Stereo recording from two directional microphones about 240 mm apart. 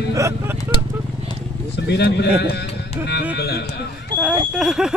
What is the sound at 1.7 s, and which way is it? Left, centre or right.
A man's voice, left.